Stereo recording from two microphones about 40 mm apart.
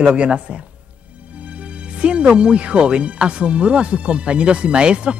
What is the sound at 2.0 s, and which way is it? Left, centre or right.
Speech, right.